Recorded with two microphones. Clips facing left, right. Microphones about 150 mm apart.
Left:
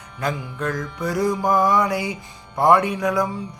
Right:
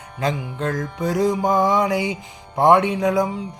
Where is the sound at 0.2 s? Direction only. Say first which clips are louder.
Right 2 dB; 20° right (ahead or behind).